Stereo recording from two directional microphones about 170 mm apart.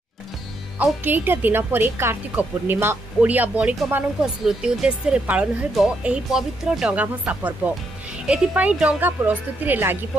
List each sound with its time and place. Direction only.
0.7 s speech: 10° right (ahead or behind)